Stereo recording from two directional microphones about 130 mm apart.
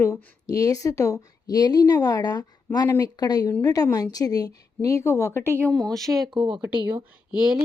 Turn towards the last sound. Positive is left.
turn(degrees=-5)  # may be behind; listen again after turning